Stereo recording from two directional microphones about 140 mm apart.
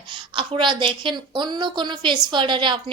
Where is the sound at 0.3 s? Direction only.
35° right (ahead or behind).